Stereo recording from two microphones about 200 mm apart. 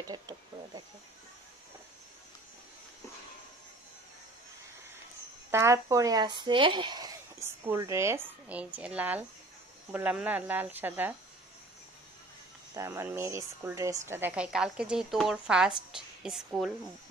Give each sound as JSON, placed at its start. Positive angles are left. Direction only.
{"t": 0.0, "sound": "speech", "side_deg": -20}
{"t": 5.5, "sound": "a woman's voice", "side_deg": -15}
{"t": 12.7, "sound": "a woman's voice", "side_deg": -15}